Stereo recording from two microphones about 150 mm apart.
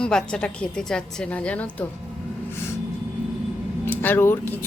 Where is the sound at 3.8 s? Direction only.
10° left (ahead or behind).